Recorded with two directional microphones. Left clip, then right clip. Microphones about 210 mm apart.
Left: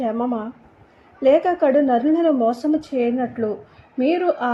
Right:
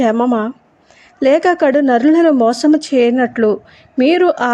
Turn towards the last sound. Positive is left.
turn(degrees=-30)  # may be behind; listen again after turning